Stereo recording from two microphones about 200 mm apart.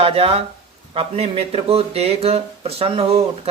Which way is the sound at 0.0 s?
30° right (ahead or behind).